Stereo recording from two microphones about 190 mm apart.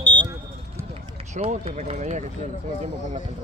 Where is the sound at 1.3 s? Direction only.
35° right (ahead or behind).